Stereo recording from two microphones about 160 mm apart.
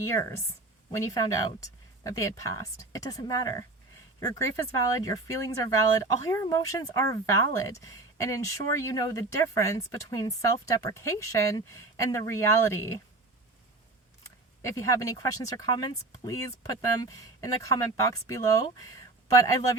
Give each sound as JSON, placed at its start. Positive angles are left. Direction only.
{"t": 0.0, "sound": "speech", "side_deg": 15}
{"t": 14.6, "sound": "speech", "side_deg": 20}